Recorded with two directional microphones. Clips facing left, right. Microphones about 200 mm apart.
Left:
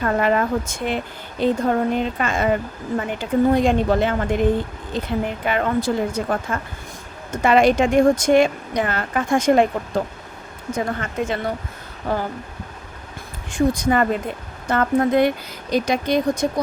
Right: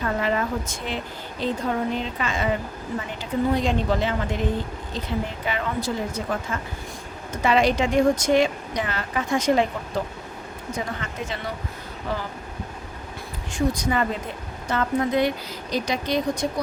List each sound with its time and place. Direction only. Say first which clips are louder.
0.0 s speech: left 5 dB; 55° left (ahead or behind)
10.8 s speech: left 7 dB; 50° left (ahead or behind)
13.5 s speech: left 5 dB; 50° left (ahead or behind)